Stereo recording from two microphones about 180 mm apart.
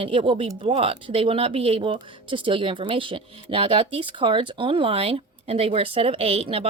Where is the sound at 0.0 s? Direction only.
30° right (ahead or behind).